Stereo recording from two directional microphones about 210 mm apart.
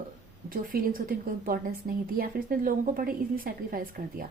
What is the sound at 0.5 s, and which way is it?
A woman's voice, 40° right (ahead or behind).